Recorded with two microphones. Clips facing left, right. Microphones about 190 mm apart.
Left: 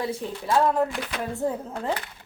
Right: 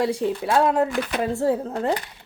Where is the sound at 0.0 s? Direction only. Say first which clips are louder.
Right 7 dB; 75° right (ahead or behind).